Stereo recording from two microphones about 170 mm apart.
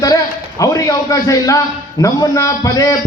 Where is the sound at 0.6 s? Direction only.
20° left (ahead or behind).